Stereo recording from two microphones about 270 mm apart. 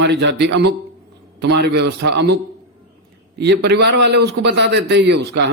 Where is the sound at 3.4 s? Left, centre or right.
Right.